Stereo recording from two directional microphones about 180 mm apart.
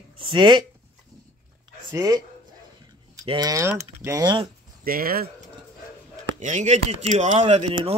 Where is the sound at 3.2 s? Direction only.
20° right (ahead or behind).